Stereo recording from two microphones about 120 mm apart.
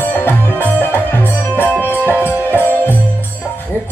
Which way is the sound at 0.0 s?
15° left (ahead or behind).